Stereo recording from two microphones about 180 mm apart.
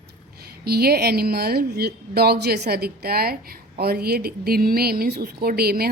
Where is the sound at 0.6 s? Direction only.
60° right (ahead or behind).